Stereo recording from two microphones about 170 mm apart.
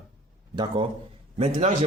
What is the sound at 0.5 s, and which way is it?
Speech, 25° right (ahead or behind).